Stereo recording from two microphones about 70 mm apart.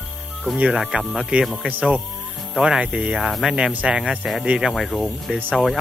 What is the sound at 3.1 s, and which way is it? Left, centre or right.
Speech, centre.